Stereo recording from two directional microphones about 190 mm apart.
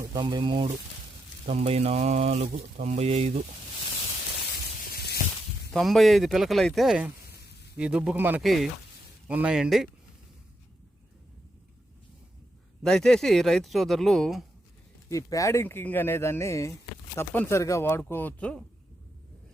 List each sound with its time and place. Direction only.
0.1 s speech: 25° right (ahead or behind)
4.9 s a sound: 55° left (ahead or behind)
5.7 s speech: centre (ahead or behind)
12.8 s speech: 5° left (ahead or behind)
15.1 s speech: 15° left (ahead or behind)